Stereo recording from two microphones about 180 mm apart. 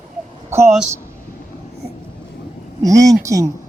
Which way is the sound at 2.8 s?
20° right (ahead or behind).